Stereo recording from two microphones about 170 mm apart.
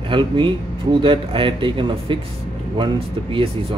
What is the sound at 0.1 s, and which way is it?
A man's voice, 30° right (ahead or behind).